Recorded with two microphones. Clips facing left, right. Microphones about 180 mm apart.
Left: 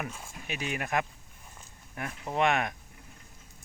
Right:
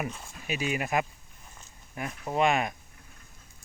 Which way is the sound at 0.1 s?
10° left (ahead or behind).